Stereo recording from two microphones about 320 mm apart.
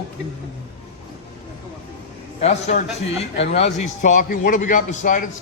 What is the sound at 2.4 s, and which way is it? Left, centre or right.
A man's voice, left.